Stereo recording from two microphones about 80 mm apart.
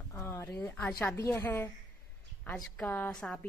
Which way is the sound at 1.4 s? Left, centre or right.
Left.